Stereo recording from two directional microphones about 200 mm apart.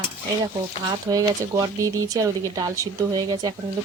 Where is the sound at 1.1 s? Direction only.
15° right (ahead or behind).